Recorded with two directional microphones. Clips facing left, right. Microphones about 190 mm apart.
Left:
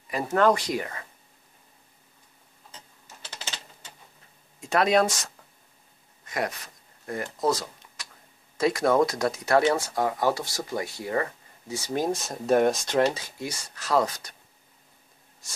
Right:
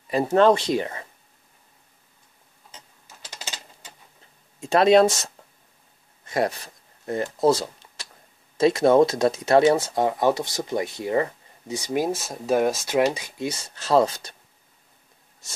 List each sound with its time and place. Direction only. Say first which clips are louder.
0.1 s speech: right 5 dB; 25° right (ahead or behind)
4.6 s speech: right 6 dB; 25° right (ahead or behind)
6.2 s a sound: right 6 dB; 30° right (ahead or behind)
8.5 s speech: right 5 dB; 25° right (ahead or behind)